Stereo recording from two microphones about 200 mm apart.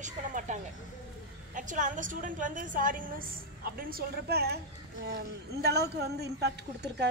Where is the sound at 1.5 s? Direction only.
40° right (ahead or behind); by 7.1 s 55° right (ahead or behind).